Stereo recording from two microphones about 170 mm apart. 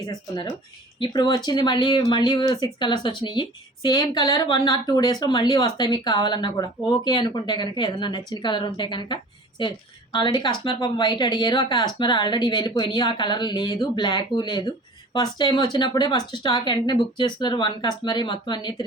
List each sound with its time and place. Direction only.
0.1 s speech: 25° left (ahead or behind)